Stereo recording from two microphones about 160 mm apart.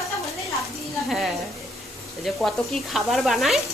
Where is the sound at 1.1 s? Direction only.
Centre (ahead or behind).